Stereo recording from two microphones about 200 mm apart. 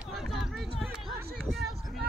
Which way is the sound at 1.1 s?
50° right (ahead or behind).